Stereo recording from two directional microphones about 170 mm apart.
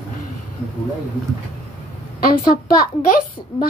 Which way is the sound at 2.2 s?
60° left (ahead or behind).